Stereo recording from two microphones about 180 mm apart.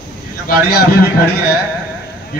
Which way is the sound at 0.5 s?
55° left (ahead or behind).